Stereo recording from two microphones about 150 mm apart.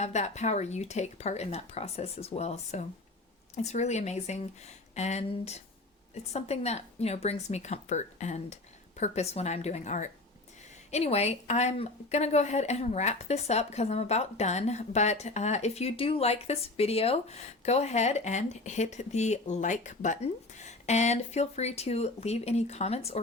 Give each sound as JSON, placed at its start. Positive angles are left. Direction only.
{"t": 0.0, "sound": "speech", "side_deg": 50}